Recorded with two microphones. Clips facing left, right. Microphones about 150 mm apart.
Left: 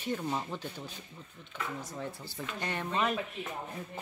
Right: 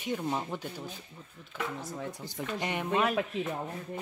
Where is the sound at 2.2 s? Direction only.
15° right (ahead or behind).